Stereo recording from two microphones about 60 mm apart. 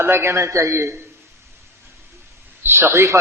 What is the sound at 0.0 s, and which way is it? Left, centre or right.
A man's voice, right.